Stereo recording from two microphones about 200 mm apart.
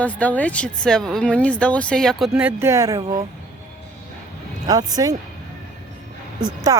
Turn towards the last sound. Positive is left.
turn(degrees=-15)  # may be behind; listen again after turning